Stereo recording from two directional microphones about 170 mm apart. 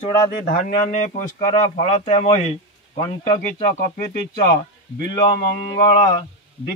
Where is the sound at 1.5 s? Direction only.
35° left (ahead or behind).